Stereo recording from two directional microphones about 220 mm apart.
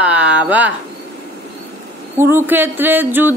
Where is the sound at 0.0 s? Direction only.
5° right (ahead or behind).